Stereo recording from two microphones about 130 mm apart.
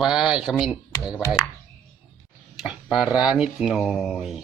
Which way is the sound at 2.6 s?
5° right (ahead or behind).